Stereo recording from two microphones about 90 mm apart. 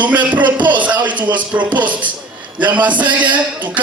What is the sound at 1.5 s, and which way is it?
Speech, 30° right (ahead or behind).